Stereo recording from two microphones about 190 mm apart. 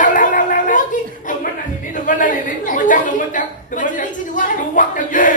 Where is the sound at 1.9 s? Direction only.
45° left (ahead or behind).